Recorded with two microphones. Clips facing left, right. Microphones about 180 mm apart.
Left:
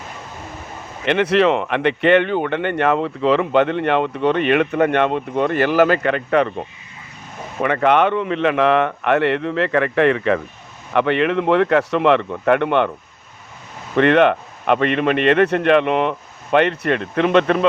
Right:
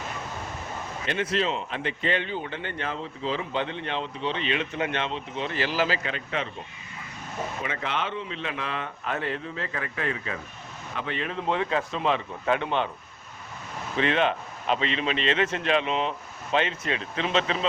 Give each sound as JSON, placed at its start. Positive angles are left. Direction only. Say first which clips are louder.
{"t": 1.0, "sound": "a man's voice", "louder": "left 12 dB", "side_deg": 70}
{"t": 13.9, "sound": "speech", "louder": "left 11 dB", "side_deg": 65}